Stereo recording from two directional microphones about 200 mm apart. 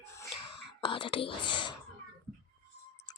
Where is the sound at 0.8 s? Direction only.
25° left (ahead or behind).